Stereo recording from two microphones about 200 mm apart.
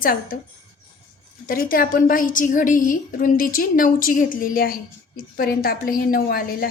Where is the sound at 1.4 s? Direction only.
45° left (ahead or behind).